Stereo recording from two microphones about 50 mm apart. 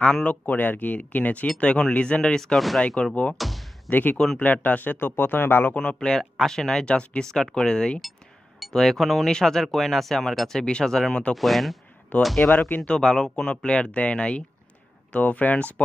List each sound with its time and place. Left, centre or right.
0.2 s speech: left
2.5 s speech: centre
3.3 s a sound: centre
3.9 s speech: left
5.8 s speech: centre
12.1 s speech: left
13.0 s speech: centre; by 15.7 s left